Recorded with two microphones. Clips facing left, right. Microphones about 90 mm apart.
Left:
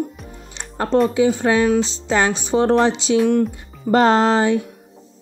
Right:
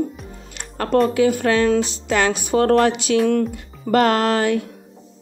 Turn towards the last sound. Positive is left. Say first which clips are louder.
# left 3 dB
turn(degrees=25)  # may be behind; listen again after turning